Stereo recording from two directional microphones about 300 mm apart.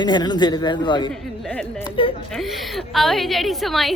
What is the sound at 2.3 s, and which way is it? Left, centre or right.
A woman's voice, centre.